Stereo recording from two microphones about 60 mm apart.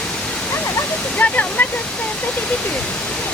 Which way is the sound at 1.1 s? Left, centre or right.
Left.